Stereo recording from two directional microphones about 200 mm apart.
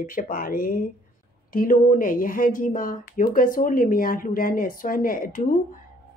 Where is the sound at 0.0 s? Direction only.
45° left (ahead or behind).